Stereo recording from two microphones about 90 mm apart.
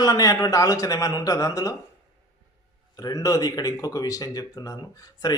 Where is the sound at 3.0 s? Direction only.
45° left (ahead or behind).